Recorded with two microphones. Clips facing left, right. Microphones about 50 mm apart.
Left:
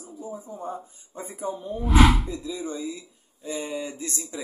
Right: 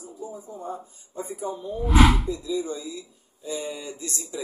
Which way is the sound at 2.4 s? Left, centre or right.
Left.